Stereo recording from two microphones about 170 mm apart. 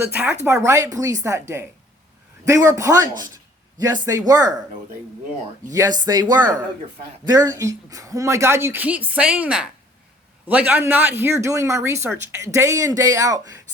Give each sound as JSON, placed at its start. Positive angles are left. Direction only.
{"t": 0.0, "sound": "speech", "side_deg": -10}
{"t": 5.7, "sound": "speech", "side_deg": -20}